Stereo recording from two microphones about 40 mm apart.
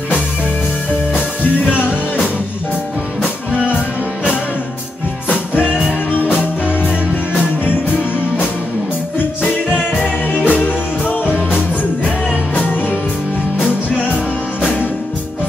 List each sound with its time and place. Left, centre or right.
6.7 s music: left
10.0 s music: left